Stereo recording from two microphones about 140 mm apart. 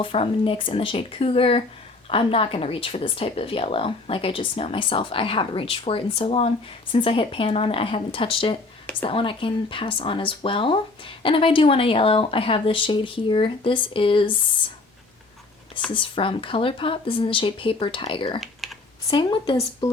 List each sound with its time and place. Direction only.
0.0 s speech: 40° left (ahead or behind)
15.9 s speech: 35° left (ahead or behind)
18.6 s computer keyboard: centre (ahead or behind)
19.1 s speech: 35° left (ahead or behind)